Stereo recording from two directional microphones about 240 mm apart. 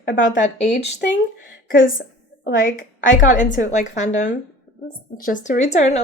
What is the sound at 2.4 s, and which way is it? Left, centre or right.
Speech, left.